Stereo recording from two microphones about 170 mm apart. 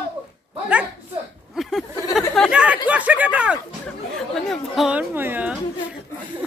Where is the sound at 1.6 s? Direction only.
Centre (ahead or behind).